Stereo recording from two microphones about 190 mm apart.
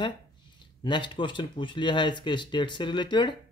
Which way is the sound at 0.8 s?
25° left (ahead or behind).